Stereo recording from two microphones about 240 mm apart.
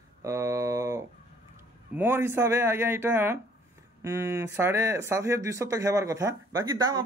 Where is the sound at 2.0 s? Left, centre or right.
Centre.